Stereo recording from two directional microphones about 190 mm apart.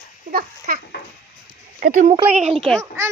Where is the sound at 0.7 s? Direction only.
50° right (ahead or behind).